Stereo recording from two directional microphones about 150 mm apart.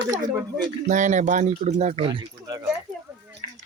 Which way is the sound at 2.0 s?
30° right (ahead or behind).